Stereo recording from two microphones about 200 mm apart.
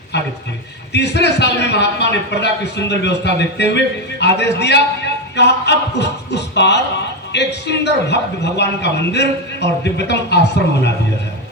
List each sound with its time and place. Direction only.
0.9 s a man's voice: 60° left (ahead or behind)